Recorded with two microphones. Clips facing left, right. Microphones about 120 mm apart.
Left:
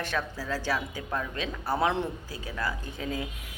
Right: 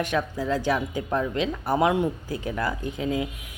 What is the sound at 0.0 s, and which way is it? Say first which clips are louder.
A woman's voice: right 6 dB; 15° right (ahead or behind).